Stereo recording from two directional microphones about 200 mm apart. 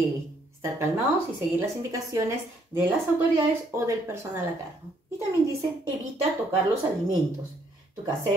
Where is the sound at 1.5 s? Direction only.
15° right (ahead or behind).